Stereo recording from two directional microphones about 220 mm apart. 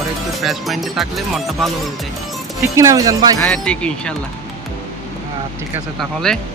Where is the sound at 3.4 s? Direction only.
5° left (ahead or behind).